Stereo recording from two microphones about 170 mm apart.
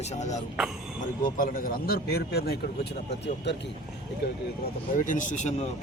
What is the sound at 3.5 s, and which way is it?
Speech, 90° left.